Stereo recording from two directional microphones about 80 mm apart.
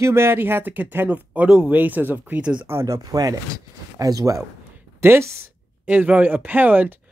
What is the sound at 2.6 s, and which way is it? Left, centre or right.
Speech, right.